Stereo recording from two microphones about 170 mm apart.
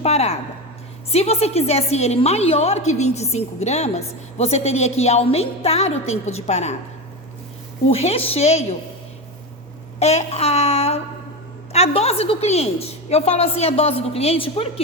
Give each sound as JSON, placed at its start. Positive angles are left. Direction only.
{"t": 0.0, "sound": "a woman's voice", "side_deg": 40}
{"t": 7.9, "sound": "a woman's voice", "side_deg": 35}
{"t": 10.0, "sound": "a woman's voice", "side_deg": 40}